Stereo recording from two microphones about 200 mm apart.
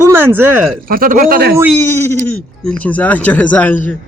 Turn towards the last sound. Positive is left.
turn(degrees=10)  # may be behind; listen again after turning